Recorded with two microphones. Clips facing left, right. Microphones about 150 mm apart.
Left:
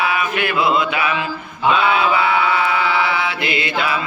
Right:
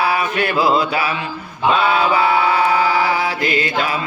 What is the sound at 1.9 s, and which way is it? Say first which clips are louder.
Mantra: right 1 dB; 40° right (ahead or behind).